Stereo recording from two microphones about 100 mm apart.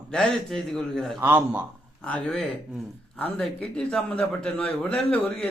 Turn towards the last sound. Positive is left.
turn(degrees=10)  # may be behind; listen again after turning